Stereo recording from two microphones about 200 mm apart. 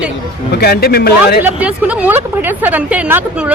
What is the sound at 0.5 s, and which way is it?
Speech, 50° left (ahead or behind).